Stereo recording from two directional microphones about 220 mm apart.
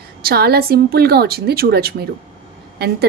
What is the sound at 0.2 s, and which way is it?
A woman's voice, 45° right (ahead or behind).